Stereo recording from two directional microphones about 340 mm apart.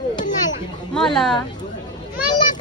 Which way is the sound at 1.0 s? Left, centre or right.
Centre.